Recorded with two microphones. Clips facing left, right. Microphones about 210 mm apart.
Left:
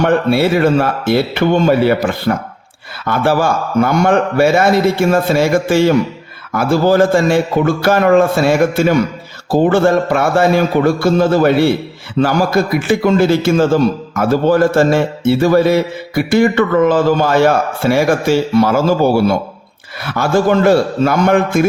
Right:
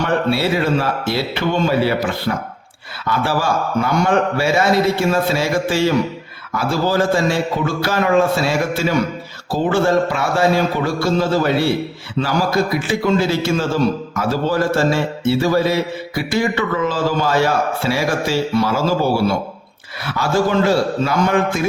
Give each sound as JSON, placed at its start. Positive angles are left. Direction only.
{"t": 0.0, "sound": "a man's voice", "side_deg": 50}
{"t": 20.1, "sound": "a man's voice", "side_deg": 55}